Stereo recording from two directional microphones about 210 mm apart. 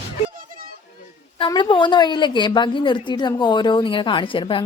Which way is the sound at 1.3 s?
25° left (ahead or behind).